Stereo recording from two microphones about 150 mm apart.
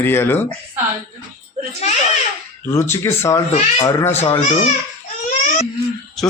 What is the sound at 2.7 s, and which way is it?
A man's voice, 15° left (ahead or behind).